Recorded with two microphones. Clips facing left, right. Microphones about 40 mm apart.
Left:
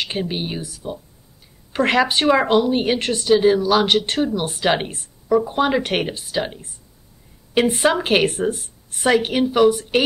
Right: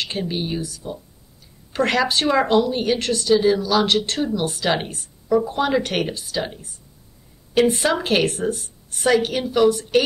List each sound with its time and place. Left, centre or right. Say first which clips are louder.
0.0 s a woman's voice: left 1 dB; left